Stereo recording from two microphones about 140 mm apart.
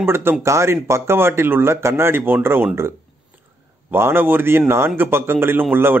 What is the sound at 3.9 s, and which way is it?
Speech, 15° right (ahead or behind).